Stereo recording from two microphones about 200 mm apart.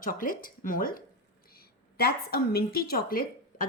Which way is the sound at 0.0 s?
45° left (ahead or behind).